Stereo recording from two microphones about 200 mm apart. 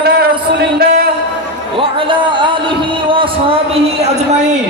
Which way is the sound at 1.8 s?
25° right (ahead or behind).